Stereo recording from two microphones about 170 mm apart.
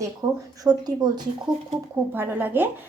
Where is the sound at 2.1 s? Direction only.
10° right (ahead or behind).